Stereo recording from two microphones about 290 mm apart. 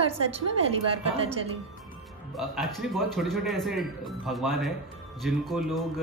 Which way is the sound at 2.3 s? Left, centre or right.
Centre.